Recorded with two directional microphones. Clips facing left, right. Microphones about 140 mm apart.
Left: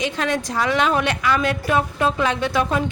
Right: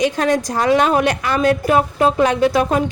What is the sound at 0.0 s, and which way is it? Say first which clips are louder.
A woman's voice: right 6 dB; 40° right (ahead or behind).